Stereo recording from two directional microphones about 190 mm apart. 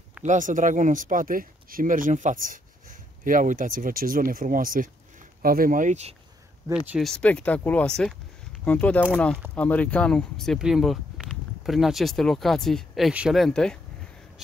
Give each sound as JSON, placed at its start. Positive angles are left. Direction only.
{"t": 0.2, "sound": "speech", "side_deg": -40}
{"t": 6.9, "sound": "speech", "side_deg": 0}